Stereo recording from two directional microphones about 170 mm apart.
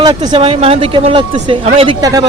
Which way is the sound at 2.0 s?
20° right (ahead or behind).